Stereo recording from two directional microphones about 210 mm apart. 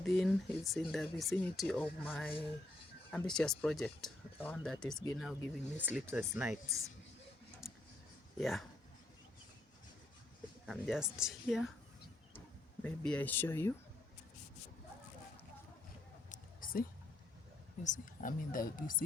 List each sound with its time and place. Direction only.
0.0 s speech: centre (ahead or behind)
7.6 s a sound: centre (ahead or behind)
8.4 s speech: centre (ahead or behind)
10.7 s speech: centre (ahead or behind)
12.8 s speech: 5° left (ahead or behind)
16.3 s a sound: 40° left (ahead or behind)
17.8 s speech: 40° left (ahead or behind)